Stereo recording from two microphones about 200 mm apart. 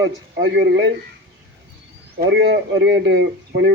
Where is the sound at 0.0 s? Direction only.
70° right (ahead or behind).